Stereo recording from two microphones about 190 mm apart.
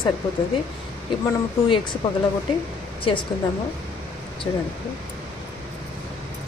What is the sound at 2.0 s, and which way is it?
Speech, 30° left (ahead or behind).